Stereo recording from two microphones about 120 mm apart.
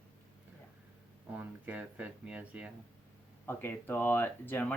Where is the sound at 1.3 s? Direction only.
10° right (ahead or behind).